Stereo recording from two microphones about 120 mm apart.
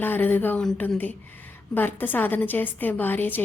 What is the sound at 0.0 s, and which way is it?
A woman's voice, 15° left (ahead or behind).